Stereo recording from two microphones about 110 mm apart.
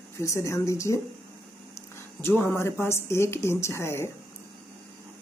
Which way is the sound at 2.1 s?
20° left (ahead or behind).